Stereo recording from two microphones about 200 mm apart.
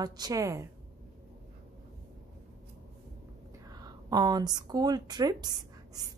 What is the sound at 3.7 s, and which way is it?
A woman's voice, 20° right (ahead or behind).